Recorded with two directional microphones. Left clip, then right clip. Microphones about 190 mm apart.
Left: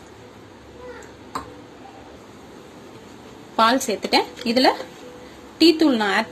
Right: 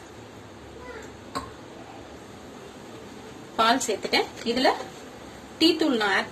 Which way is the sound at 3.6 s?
50° left (ahead or behind).